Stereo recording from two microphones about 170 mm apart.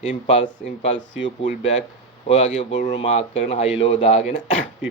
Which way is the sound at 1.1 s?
90° left.